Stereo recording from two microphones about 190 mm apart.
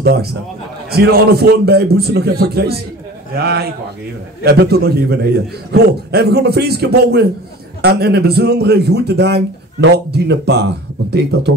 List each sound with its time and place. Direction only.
0.0 s a man's voice: 55° right (ahead or behind)